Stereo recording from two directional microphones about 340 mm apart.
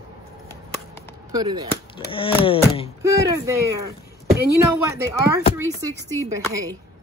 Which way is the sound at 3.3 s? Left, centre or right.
Centre.